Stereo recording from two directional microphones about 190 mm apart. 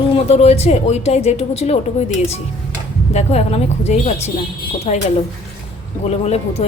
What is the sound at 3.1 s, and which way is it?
A woman's voice, 35° left (ahead or behind).